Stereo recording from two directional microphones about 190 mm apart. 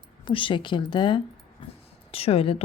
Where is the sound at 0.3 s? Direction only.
25° left (ahead or behind).